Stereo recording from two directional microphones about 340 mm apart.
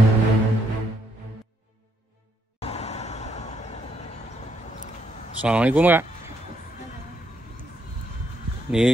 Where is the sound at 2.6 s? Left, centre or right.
Centre.